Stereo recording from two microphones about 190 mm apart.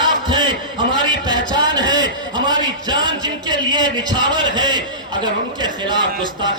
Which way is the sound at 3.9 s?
25° right (ahead or behind).